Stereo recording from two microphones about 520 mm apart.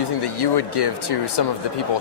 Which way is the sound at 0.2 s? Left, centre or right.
Left.